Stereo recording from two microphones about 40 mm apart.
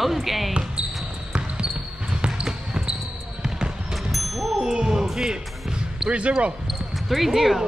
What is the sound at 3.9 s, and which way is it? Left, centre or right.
Thump, centre.